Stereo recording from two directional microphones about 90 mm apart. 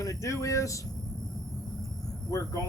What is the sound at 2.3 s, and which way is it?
Speech, 40° left (ahead or behind).